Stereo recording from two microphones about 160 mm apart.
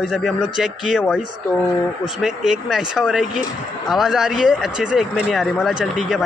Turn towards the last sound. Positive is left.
turn(degrees=0)  # may be behind; listen again after turning